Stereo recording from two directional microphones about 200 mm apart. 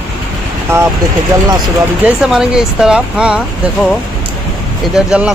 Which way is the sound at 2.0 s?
5° right (ahead or behind).